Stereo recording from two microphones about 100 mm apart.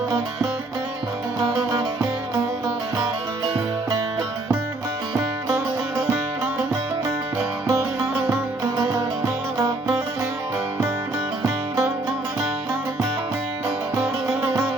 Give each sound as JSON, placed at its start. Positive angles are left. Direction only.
{"t": 7.3, "sound": "music", "side_deg": -25}
{"t": 13.9, "sound": "music", "side_deg": -25}